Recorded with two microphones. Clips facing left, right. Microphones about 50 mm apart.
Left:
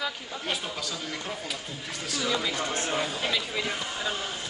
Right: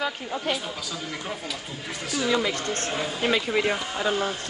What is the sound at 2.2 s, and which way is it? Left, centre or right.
Speech, right.